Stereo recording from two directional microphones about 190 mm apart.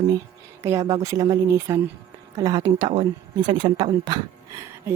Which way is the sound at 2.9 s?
30° right (ahead or behind).